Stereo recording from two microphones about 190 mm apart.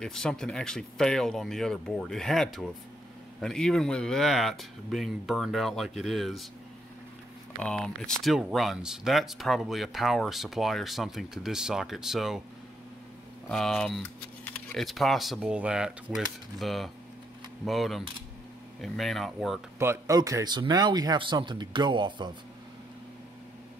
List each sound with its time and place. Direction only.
0.0 s speech: 5° left (ahead or behind)
7.6 s speech: 5° left (ahead or behind)
13.5 s speech: centre (ahead or behind)
19.8 s speech: 15° right (ahead or behind)